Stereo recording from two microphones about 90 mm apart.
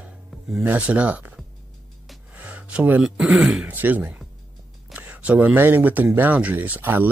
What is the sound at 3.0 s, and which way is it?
Speech, 10° right (ahead or behind).